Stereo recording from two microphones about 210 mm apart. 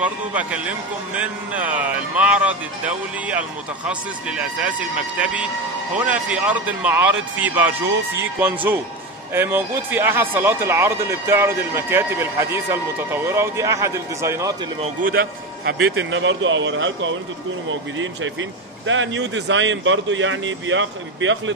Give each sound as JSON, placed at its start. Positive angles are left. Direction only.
{"t": 0.0, "sound": "speech", "side_deg": -5}
{"t": 3.8, "sound": "speech", "side_deg": -5}
{"t": 5.9, "sound": "speech", "side_deg": -5}
{"t": 15.0, "sound": "a man's voice", "side_deg": -45}
{"t": 15.8, "sound": "a man's voice", "side_deg": -65}